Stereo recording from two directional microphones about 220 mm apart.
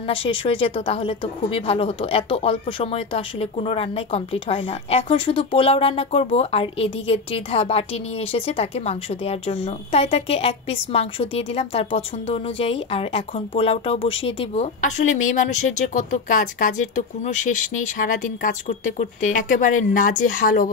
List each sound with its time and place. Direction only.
0.0 s a woman's voice: 25° left (ahead or behind)